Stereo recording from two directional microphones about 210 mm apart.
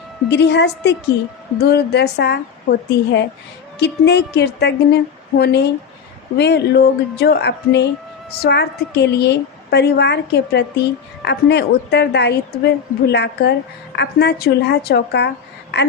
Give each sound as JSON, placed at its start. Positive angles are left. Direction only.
{"t": 0.3, "sound": "a woman's voice", "side_deg": 55}